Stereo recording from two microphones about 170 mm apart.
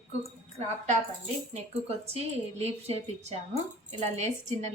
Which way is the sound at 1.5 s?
35° right (ahead or behind).